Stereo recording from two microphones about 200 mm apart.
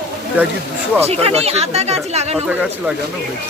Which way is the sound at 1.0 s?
30° right (ahead or behind).